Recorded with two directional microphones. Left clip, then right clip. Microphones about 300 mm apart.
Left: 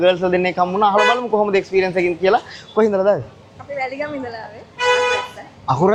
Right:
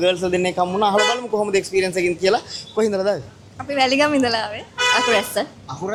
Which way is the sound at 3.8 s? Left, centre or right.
Right.